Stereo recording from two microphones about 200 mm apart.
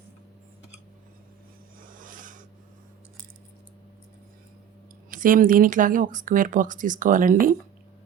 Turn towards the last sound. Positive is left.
turn(degrees=-45)  # may be behind; listen again after turning